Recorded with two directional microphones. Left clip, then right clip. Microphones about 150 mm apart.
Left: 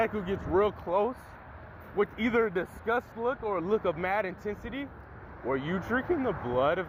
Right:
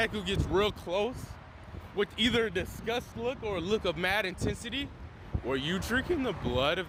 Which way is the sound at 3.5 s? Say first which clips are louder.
Left 2 dB; 55° right (ahead or behind).